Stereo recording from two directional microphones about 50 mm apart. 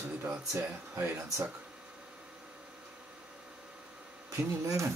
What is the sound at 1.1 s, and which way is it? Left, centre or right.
Speech, right.